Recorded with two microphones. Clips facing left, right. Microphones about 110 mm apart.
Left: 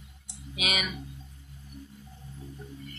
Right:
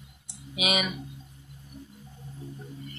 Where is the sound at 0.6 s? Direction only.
15° right (ahead or behind).